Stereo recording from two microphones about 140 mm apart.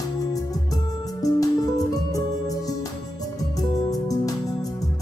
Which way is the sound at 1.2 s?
25° left (ahead or behind).